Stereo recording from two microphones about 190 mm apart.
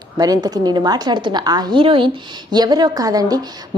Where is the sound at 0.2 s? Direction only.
20° right (ahead or behind).